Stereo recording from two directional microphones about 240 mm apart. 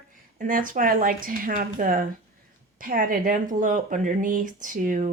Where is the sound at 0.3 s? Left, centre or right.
Right.